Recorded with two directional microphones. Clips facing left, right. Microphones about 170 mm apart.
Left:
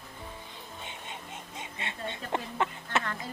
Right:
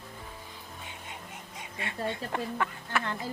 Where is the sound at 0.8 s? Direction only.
25° left (ahead or behind).